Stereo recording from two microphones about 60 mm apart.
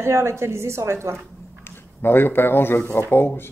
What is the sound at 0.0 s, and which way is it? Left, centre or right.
A woman's voice, right.